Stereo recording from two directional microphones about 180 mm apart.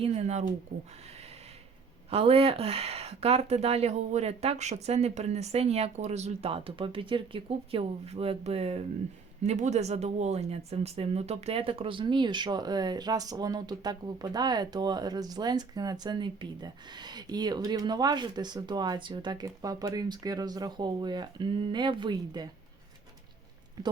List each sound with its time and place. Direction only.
0.0 s speech: 35° right (ahead or behind)
2.0 s speech: 35° right (ahead or behind)